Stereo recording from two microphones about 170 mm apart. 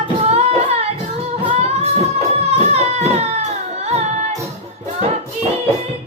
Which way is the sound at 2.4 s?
35° right (ahead or behind).